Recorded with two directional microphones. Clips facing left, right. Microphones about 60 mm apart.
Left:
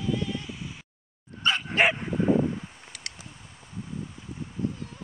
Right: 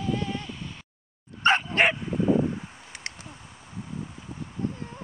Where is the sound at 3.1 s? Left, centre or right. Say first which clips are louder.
Right 3 dB; right.